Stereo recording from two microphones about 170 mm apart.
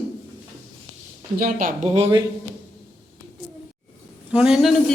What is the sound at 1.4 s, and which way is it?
Speech, 55° right (ahead or behind).